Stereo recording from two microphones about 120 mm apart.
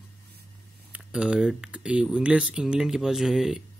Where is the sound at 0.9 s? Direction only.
10° right (ahead or behind).